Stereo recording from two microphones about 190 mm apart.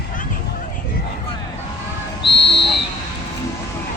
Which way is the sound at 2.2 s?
65° left (ahead or behind).